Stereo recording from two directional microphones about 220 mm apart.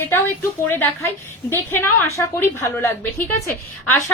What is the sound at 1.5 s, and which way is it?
Speech, 10° left (ahead or behind).